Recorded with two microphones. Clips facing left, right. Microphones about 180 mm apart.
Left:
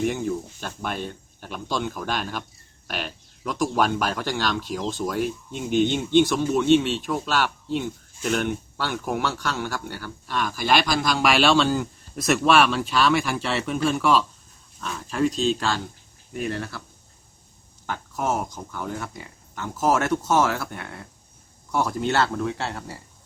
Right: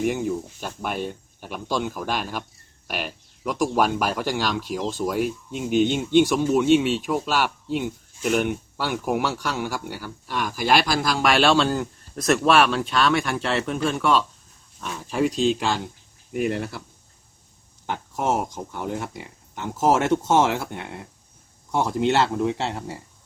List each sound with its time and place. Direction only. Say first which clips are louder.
0.0 s speech: right 1 dB; 5° right (ahead or behind)
14.8 s speech: right 1 dB; 10° right (ahead or behind)
17.8 s speech: right 2 dB; 25° right (ahead or behind)